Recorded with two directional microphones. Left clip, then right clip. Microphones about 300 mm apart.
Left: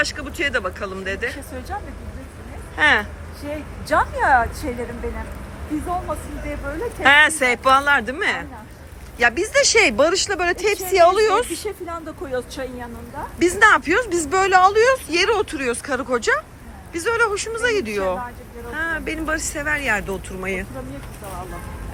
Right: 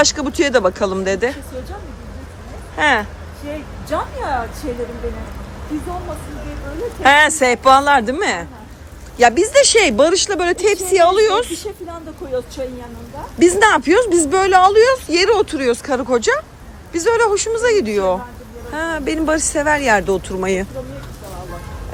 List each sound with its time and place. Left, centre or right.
0.0 s a woman's voice: centre
2.7 s a woman's voice: centre
3.9 s speech: left
7.0 s a woman's voice: centre
11.9 s speech: left
13.4 s a woman's voice: centre